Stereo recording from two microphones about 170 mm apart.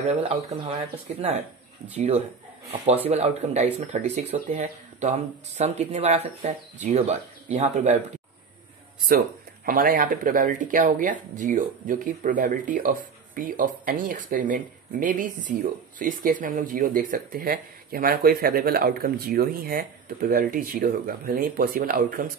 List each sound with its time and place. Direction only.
0.2 s speech: 40° right (ahead or behind)
2.0 s speech: 40° right (ahead or behind)
9.7 s speech: 55° right (ahead or behind)